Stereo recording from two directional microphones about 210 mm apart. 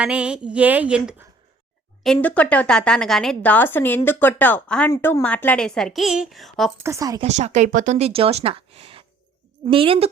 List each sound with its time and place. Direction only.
0.0 s speech: 5° right (ahead or behind)
2.0 s a woman's voice: 5° left (ahead or behind)
6.8 s speech: 15° right (ahead or behind)
7.3 s speech: 35° right (ahead or behind)